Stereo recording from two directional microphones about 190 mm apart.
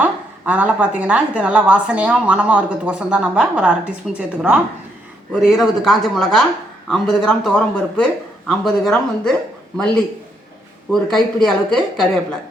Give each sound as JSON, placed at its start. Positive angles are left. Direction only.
{"t": 0.0, "sound": "a woman's voice", "side_deg": -5}